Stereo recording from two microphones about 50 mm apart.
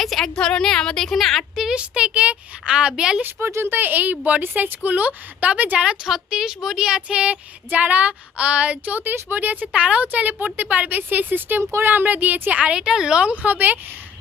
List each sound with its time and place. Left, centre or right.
0.0 s a sound: centre
0.3 s a woman's voice: centre
1.7 s a woman's voice: right
3.4 s speech: right
3.8 s a woman's voice: right
4.4 s speech: right
5.8 s a woman's voice: centre; by 8.8 s right
8.8 s speech: right
9.7 s a woman's voice: right
11.6 s speech: right
11.9 s speech: right
12.8 s speech: centre
13.2 s speech: right